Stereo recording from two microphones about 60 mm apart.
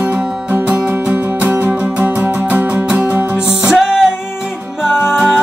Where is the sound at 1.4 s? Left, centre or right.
Right.